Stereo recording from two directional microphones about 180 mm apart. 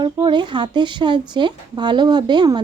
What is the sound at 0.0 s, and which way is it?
Speech, 25° right (ahead or behind).